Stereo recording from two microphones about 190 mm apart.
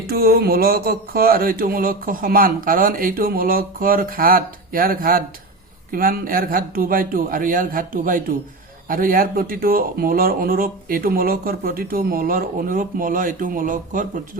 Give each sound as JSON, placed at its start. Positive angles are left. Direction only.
{"t": 0.1, "sound": "speech", "side_deg": -55}